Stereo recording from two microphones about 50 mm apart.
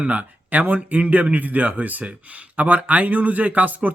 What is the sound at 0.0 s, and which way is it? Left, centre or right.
Speech, right.